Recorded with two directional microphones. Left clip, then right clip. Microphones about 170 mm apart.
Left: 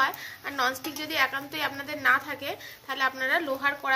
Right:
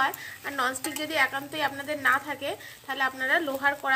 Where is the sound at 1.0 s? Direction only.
55° right (ahead or behind).